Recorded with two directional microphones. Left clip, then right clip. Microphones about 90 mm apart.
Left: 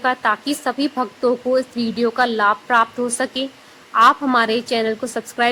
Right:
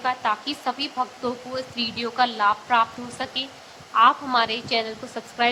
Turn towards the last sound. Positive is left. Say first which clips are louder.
# left 5 dB
turn(degrees=30)  # may be behind; listen again after turning